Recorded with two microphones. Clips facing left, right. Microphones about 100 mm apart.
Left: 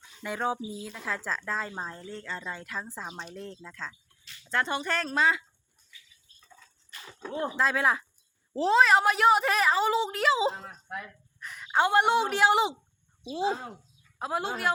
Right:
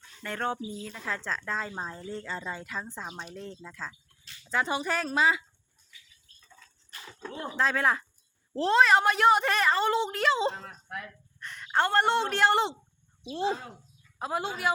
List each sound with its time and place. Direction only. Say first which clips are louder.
0.0 s a woman's voice: left 2 dB; 10° left (ahead or behind)
6.4 s dog: left 1 dB; 5° left (ahead or behind)
7.5 s a woman's voice: right 1 dB; 5° left (ahead or behind)
11.3 s a woman's voice: left 1 dB; 5° left (ahead or behind)